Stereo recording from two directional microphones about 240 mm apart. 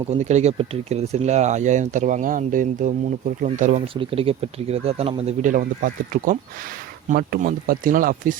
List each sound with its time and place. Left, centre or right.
0.1 s speech: right